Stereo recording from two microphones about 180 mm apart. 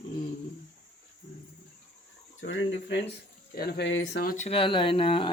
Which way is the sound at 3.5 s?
55° left (ahead or behind).